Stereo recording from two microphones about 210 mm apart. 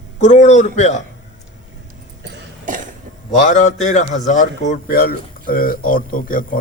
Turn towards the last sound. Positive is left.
turn(degrees=40)  # may be behind; listen again after turning